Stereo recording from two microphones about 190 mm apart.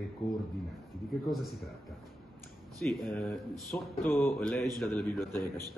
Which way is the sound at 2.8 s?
Centre (ahead or behind).